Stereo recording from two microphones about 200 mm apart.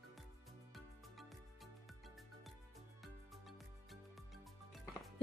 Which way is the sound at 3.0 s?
Centre (ahead or behind).